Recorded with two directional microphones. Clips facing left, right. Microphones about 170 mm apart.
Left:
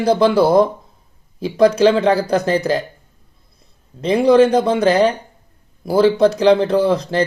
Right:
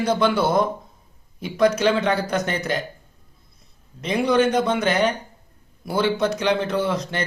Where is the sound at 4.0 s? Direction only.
30° left (ahead or behind).